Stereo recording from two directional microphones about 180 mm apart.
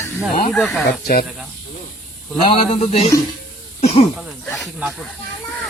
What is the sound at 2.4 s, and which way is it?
Speech, 35° left (ahead or behind).